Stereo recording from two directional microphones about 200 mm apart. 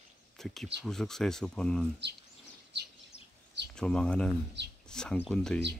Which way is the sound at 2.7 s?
60° right (ahead or behind).